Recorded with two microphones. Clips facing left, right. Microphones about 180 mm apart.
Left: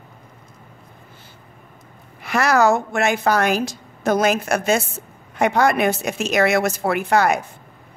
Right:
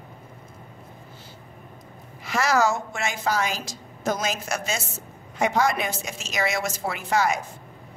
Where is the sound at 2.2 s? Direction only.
60° left (ahead or behind).